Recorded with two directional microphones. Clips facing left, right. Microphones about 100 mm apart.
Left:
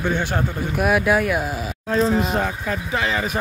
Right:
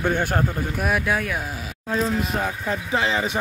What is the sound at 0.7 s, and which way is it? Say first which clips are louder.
Speech: left 7 dB; 5° left (ahead or behind).